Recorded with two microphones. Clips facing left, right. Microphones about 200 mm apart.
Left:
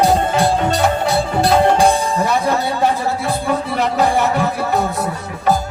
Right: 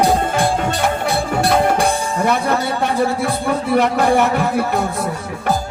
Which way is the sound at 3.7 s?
60° right (ahead or behind).